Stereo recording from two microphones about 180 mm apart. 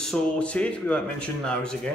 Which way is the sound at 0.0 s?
5° left (ahead or behind).